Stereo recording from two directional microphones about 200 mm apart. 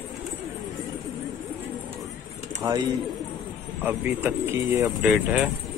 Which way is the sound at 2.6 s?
20° right (ahead or behind).